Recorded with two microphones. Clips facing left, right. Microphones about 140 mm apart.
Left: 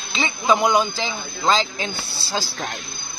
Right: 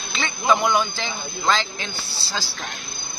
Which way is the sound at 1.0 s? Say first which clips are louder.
Left 3 dB; 30° left (ahead or behind).